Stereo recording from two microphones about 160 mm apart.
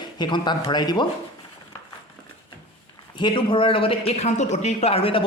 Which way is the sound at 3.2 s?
30° left (ahead or behind).